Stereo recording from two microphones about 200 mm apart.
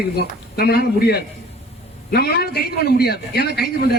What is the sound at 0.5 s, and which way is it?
A man's voice, 50° left (ahead or behind).